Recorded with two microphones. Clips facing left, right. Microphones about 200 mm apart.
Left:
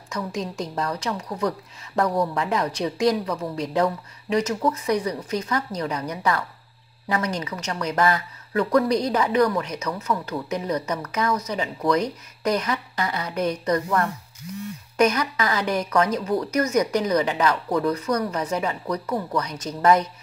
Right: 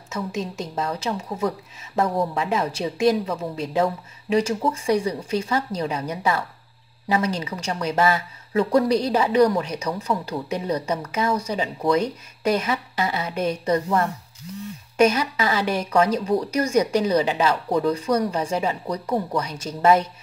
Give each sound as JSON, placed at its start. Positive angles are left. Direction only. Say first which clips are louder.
{"t": 0.1, "sound": "speech", "louder": "right 1 dB", "side_deg": -25}